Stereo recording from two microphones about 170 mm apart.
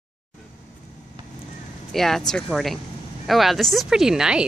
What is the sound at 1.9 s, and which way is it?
A woman's voice, centre (ahead or behind).